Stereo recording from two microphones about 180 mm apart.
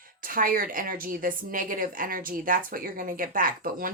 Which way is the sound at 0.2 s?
50° right (ahead or behind).